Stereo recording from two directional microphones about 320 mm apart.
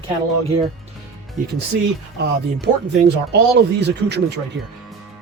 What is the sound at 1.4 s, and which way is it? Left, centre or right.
A woman's voice, right.